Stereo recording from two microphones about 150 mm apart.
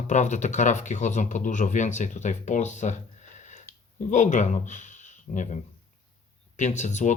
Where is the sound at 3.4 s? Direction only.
50° left (ahead or behind).